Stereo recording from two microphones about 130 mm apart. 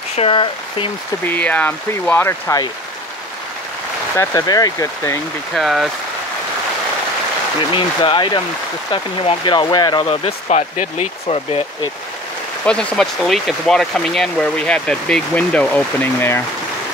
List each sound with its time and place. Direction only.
0.1 s speech: 45° left (ahead or behind)
1.2 s speech: 15° left (ahead or behind)
4.2 s speech: 30° left (ahead or behind)
5.5 s speech: centre (ahead or behind)
7.7 s speech: 40° left (ahead or behind)
10.5 s speech: 65° left (ahead or behind)
11.2 s speech: 45° left (ahead or behind)
12.6 s speech: 5° left (ahead or behind)